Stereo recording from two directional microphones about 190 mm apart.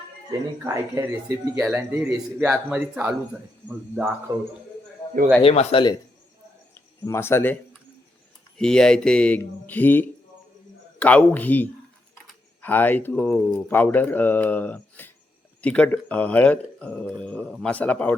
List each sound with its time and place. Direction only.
0.3 s speech: 15° right (ahead or behind)
5.0 s a sound: 15° left (ahead or behind)
5.4 s speech: 30° left (ahead or behind)
7.0 s speech: 15° left (ahead or behind)
8.5 s speech: 5° left (ahead or behind)